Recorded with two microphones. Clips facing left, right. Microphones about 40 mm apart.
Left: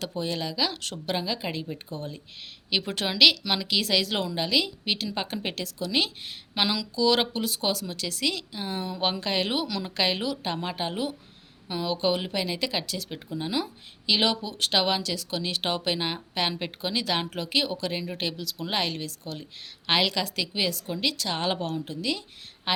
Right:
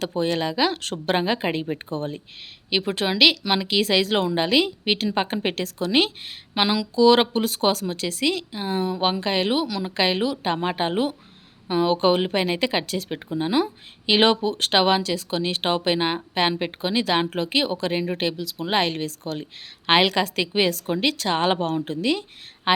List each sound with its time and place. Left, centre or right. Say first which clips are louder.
0.0 s speech: right 7 dB; right
2.6 s speech: right 5 dB; centre; by 6.1 s right
6.5 s speech: right 5 dB; centre
14.1 s speech: right 7 dB; right
14.8 s speech: right 6 dB; right
19.2 s speech: right 7 dB; right
19.9 s speech: right 6 dB; right